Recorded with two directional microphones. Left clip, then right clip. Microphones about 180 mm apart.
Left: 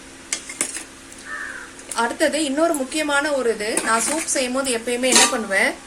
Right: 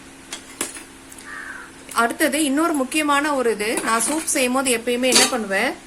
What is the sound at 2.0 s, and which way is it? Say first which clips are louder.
A woman's voice: right 1 dB; 55° right (ahead or behind).